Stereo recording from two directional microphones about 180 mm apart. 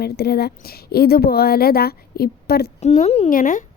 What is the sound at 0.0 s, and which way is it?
A woman's voice, 60° left (ahead or behind).